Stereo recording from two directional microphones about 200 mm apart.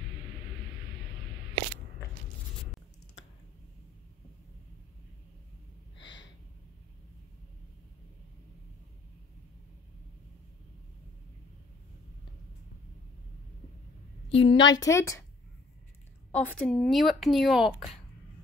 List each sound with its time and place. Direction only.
5.9 s a sound: 65° left (ahead or behind)
14.3 s a woman's voice: 30° left (ahead or behind)
14.7 s speech: 15° left (ahead or behind)
16.3 s speech: 5° left (ahead or behind)